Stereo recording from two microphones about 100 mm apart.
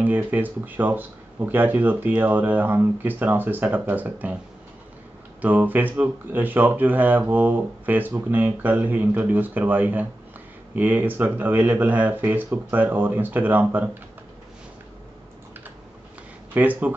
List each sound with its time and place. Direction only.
0.0 s speech: 15° right (ahead or behind)
5.4 s speech: 15° right (ahead or behind)
16.5 s speech: 15° right (ahead or behind)